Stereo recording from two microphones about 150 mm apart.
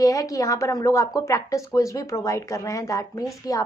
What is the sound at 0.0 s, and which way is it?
A woman's voice, 20° left (ahead or behind).